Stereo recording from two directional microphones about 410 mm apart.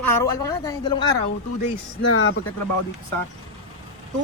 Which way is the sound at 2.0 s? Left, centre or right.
Left.